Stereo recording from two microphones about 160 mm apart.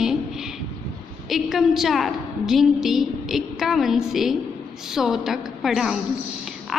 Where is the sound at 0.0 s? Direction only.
5° right (ahead or behind).